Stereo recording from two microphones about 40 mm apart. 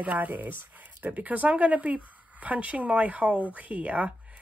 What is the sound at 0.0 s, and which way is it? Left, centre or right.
Speech, right.